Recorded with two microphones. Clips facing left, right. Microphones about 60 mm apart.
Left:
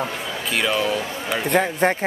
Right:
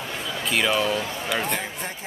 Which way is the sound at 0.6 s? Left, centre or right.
Centre.